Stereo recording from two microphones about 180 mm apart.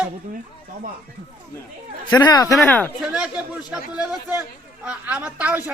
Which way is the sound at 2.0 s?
20° left (ahead or behind).